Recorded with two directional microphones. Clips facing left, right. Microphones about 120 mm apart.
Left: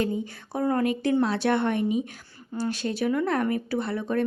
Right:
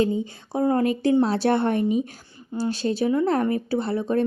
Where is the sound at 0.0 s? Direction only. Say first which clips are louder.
Right 4 dB; 25° right (ahead or behind).